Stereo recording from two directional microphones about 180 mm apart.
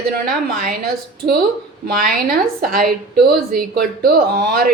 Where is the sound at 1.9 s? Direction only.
55° right (ahead or behind).